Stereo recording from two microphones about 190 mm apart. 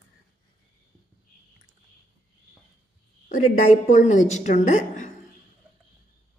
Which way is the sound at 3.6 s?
40° left (ahead or behind).